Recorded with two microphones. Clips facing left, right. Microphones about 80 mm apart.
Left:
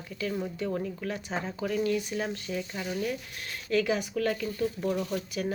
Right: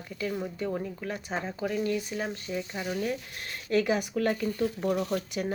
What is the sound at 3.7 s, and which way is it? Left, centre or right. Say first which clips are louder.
Speech: right 1 dB; right.